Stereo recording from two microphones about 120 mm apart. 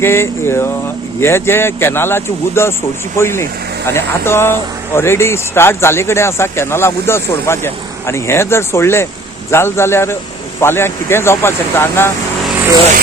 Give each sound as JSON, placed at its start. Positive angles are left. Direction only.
{"t": 0.0, "sound": "speech", "side_deg": 20}